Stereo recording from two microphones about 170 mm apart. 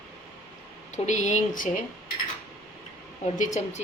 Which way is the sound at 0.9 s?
45° left (ahead or behind).